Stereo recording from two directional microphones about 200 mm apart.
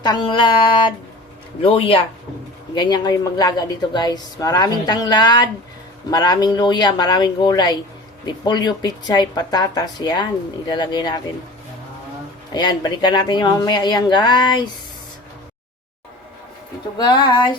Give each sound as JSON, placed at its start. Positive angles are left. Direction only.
{"t": 0.0, "sound": "speech", "side_deg": 20}
{"t": 12.5, "sound": "speech", "side_deg": 20}
{"t": 17.0, "sound": "speech", "side_deg": 20}